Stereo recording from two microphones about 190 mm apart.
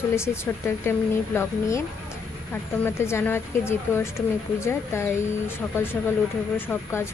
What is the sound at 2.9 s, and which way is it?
A woman's voice, 15° left (ahead or behind).